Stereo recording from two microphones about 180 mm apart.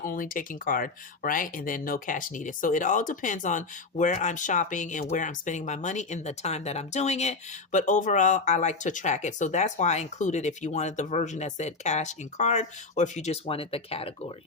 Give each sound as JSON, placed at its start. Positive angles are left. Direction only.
{"t": 0.0, "sound": "speech", "side_deg": 50}